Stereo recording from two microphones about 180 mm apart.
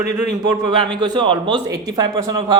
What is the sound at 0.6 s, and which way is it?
A man's voice, 25° right (ahead or behind).